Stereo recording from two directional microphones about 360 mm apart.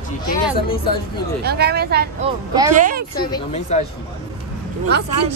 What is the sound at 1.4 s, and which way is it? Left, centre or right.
A woman's voice, right.